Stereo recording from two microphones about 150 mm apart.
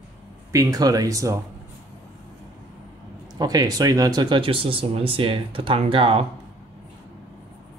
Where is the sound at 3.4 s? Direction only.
25° right (ahead or behind).